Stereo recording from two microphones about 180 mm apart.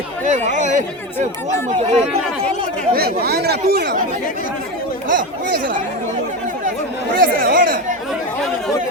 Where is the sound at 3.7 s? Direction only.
60° right (ahead or behind).